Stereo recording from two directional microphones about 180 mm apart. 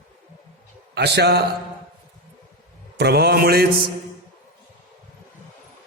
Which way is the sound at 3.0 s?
65° right (ahead or behind).